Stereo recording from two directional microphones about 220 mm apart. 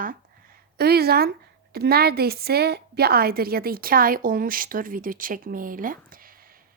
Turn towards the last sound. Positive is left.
turn(degrees=-40)  # may be behind; listen again after turning